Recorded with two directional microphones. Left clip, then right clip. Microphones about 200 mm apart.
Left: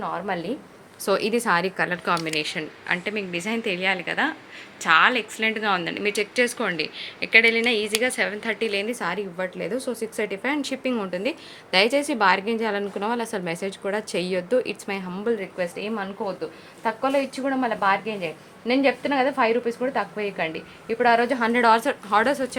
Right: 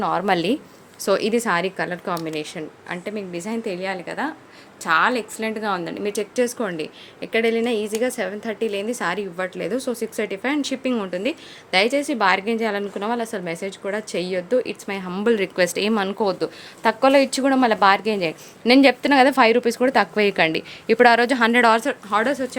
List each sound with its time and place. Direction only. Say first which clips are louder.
0.0 s a woman's voice: right 8 dB; 60° right (ahead or behind)
1.0 s a woman's voice: right 2 dB; 15° right (ahead or behind)
15.2 s a woman's voice: right 8 dB; 45° right (ahead or behind)
21.8 s a woman's voice: even; 15° right (ahead or behind)